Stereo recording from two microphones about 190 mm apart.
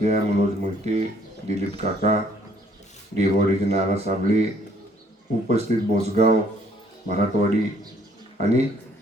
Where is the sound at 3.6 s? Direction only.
35° right (ahead or behind).